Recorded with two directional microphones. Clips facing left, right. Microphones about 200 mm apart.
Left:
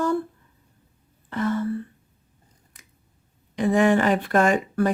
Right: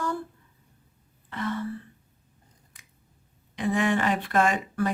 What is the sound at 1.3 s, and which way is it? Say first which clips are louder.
Gasp: left 6 dB; 40° left (ahead or behind).